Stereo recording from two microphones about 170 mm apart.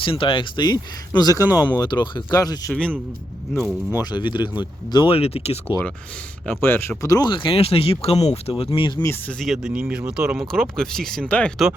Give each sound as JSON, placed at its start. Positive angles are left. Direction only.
{"t": 0.0, "sound": "speech", "side_deg": 30}
{"t": 3.7, "sound": "speech", "side_deg": -5}
{"t": 4.1, "sound": "speech", "side_deg": 25}
{"t": 6.5, "sound": "speech", "side_deg": 10}
{"t": 9.4, "sound": "speech", "side_deg": -5}